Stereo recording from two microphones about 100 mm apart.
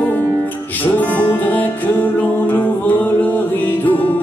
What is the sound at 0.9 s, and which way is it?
Music, 15° left (ahead or behind).